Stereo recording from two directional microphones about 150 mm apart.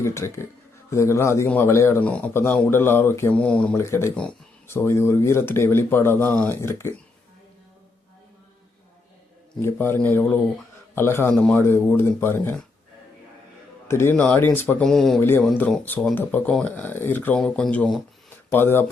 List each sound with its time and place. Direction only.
0.0 s a man's voice: 20° left (ahead or behind)
3.8 s a man's voice: 20° left (ahead or behind)
9.6 s a man's voice: 15° left (ahead or behind)
13.8 s a man's voice: 15° left (ahead or behind)
14.8 s speech: 5° left (ahead or behind)
15.2 s a man's voice: 15° left (ahead or behind)